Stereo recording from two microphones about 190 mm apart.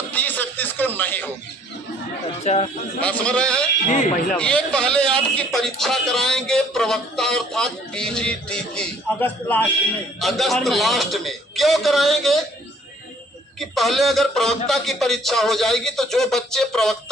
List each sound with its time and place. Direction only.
0.1 s music: 10° left (ahead or behind)
2.4 s speech: 35° left (ahead or behind)
3.0 s a man's voice: 5° left (ahead or behind)
3.8 s speech: 40° left (ahead or behind)
4.3 s a man's voice: 5° left (ahead or behind)
13.6 s a man's voice: centre (ahead or behind)